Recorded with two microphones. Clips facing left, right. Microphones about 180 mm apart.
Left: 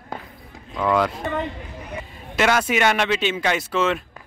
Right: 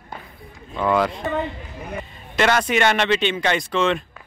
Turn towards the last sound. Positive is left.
turn(degrees=5)  # may be behind; listen again after turning